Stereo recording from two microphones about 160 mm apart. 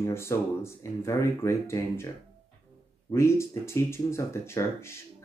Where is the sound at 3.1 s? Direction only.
15° left (ahead or behind).